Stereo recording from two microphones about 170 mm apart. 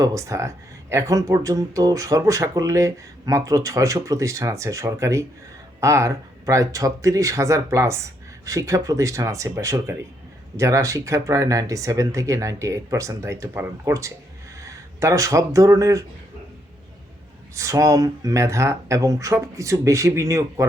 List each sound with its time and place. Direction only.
0.0 s speech: 20° right (ahead or behind)
17.5 s speech: 20° right (ahead or behind)